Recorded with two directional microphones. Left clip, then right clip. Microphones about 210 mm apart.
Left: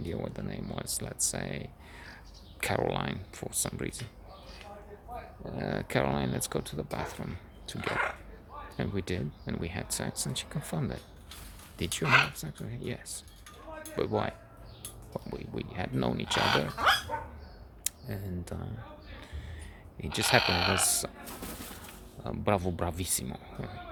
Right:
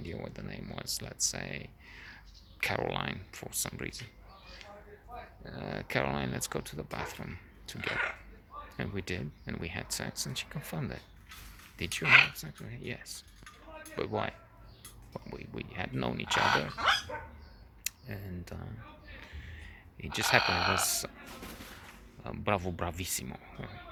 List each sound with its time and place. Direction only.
0.0 s speech: 10° left (ahead or behind)
5.5 s speech: 15° left (ahead or behind)
12.0 s speech: 5° right (ahead or behind)
12.3 s speech: 10° left (ahead or behind)
16.2 s speech: 20° right (ahead or behind)
17.1 s dog: 50° left (ahead or behind)
17.8 s speech: 10° left (ahead or behind)
20.0 s speech: 10° left (ahead or behind)
20.4 s speech: 20° right (ahead or behind)
20.7 s speech: 10° left (ahead or behind)
22.2 s speech: 10° left (ahead or behind)